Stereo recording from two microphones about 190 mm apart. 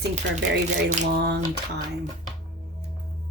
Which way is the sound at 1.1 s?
60° right (ahead or behind).